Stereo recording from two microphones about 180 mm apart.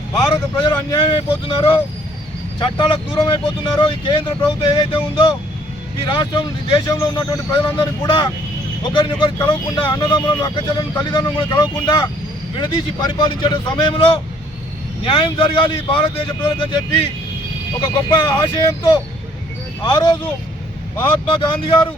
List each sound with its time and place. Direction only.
0.2 s speech: 25° left (ahead or behind)
17.7 s speech: 25° left (ahead or behind)
21.2 s speech: 25° left (ahead or behind)